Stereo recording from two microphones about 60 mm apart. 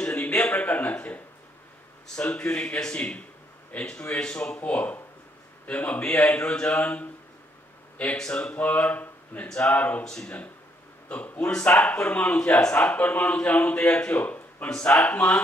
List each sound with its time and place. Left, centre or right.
0.0 s a sound: left
2.1 s speech: left
8.2 s speech: left
10.0 s speech: centre
11.1 s a man's voice: left
14.7 s speech: centre
15.0 s speech: left